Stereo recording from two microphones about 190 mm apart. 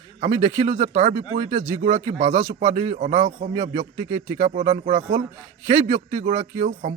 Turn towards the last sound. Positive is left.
turn(degrees=-40)  # may be behind; listen again after turning